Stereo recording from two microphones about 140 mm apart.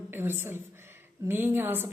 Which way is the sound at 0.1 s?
15° right (ahead or behind).